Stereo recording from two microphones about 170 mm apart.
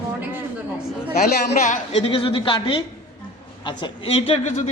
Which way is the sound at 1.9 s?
30° left (ahead or behind).